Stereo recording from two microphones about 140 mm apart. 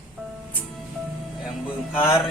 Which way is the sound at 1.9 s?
15° left (ahead or behind).